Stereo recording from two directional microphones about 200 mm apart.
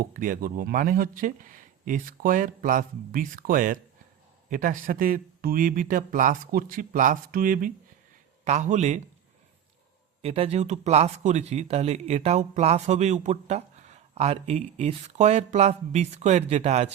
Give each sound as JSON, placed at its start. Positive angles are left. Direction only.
{"t": 0.0, "sound": "speech", "side_deg": -45}
{"t": 10.2, "sound": "speech", "side_deg": -30}